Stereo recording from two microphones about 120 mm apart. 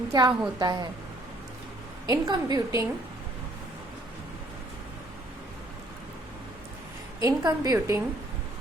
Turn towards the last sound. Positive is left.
turn(degrees=-30)  # may be behind; listen again after turning